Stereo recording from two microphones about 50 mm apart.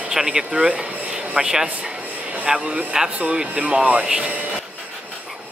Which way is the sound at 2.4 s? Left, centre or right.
Right.